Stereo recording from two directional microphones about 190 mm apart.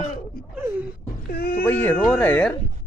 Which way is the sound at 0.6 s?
10° right (ahead or behind).